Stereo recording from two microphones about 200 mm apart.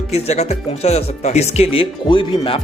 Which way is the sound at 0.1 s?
35° left (ahead or behind).